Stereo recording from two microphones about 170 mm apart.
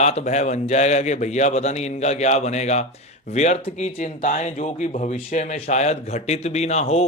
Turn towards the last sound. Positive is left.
turn(degrees=40)  # may be behind; listen again after turning